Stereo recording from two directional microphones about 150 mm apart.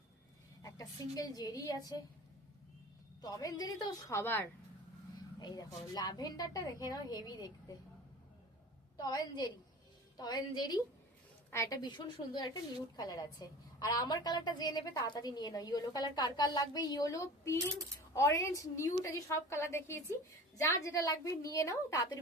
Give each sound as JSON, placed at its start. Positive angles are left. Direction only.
{"t": 0.6, "sound": "a woman's voice", "side_deg": 25}
{"t": 3.2, "sound": "a woman's voice", "side_deg": 25}
{"t": 5.4, "sound": "a woman's voice", "side_deg": 25}
{"t": 9.0, "sound": "a woman's voice", "side_deg": 30}